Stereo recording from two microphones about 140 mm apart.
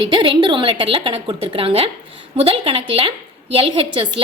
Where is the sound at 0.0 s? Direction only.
35° right (ahead or behind).